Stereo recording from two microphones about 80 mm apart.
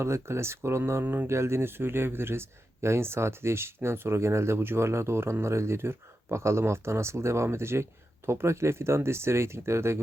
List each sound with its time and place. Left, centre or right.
0.0 s speech: right
1.0 s speech: right
1.3 s speech: right